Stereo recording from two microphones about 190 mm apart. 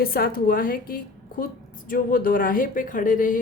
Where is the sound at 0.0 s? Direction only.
50° left (ahead or behind).